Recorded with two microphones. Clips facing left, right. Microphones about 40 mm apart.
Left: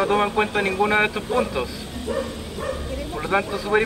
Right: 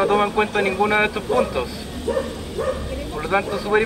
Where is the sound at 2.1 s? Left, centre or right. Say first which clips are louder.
Right 4 dB; right.